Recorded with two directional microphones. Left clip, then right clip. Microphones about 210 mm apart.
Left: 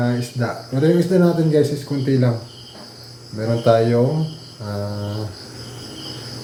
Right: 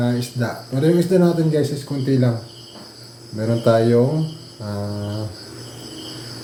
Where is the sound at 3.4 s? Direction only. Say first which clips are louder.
Left 1 dB; 10° right (ahead or behind).